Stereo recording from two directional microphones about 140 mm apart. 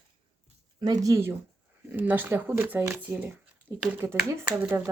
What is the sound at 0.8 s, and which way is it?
Speech, 25° right (ahead or behind).